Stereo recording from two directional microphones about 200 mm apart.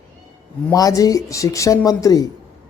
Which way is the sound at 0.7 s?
15° left (ahead or behind).